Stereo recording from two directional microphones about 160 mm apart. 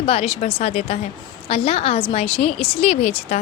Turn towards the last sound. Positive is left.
turn(degrees=40)  # may be behind; listen again after turning